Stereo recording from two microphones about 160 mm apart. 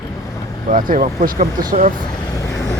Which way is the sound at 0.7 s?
55° right (ahead or behind).